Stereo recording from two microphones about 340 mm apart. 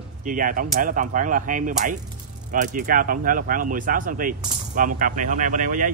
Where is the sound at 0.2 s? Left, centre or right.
Right.